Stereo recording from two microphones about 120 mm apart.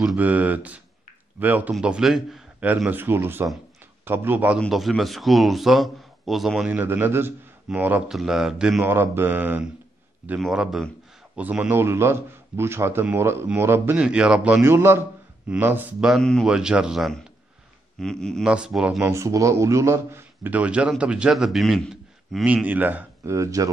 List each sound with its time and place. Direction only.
0.0 s a man's voice: 10° right (ahead or behind)
2.9 s a man's voice: 20° right (ahead or behind)
4.6 s a man's voice: centre (ahead or behind)
6.8 s a man's voice: 15° right (ahead or behind)
8.8 s a man's voice: 20° right (ahead or behind)
10.4 s a man's voice: 5° right (ahead or behind)
13.9 s a man's voice: 10° right (ahead or behind)
16.0 s a man's voice: centre (ahead or behind)
18.4 s a man's voice: 5° right (ahead or behind)
19.0 s a man's voice: 25° right (ahead or behind); by 21.8 s centre (ahead or behind)
22.4 s a man's voice: 10° right (ahead or behind)
23.3 s a man's voice: 25° right (ahead or behind)